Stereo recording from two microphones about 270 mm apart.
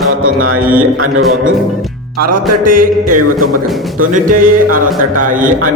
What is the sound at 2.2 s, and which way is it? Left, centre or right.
Music, right.